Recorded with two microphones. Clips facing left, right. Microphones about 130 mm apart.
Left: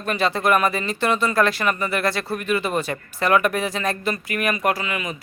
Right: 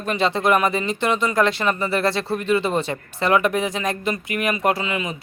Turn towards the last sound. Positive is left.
turn(degrees=-25)  # may be behind; listen again after turning